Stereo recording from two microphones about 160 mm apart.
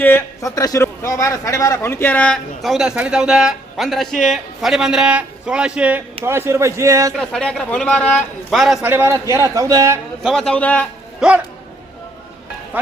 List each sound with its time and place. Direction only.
0.0 s a man's voice: 15° left (ahead or behind); by 7.1 s 20° right (ahead or behind)
7.2 s a man's voice: 5° left (ahead or behind)
8.9 s a man's voice: 15° right (ahead or behind)
10.2 s a man's voice: 5° left (ahead or behind)
11.2 s a man's voice: 5° right (ahead or behind)